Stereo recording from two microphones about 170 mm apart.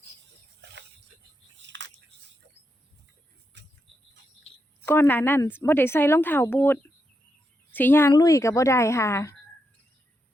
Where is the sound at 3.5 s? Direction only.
90° right.